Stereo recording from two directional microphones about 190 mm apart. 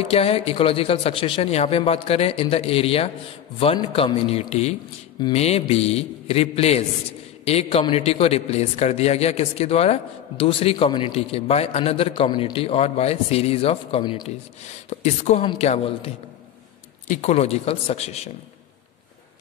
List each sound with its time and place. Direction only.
0.0 s a man's voice: 30° left (ahead or behind)
17.2 s a man's voice: 35° left (ahead or behind)